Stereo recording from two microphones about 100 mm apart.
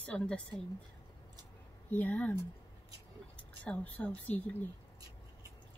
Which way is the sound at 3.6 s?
15° left (ahead or behind).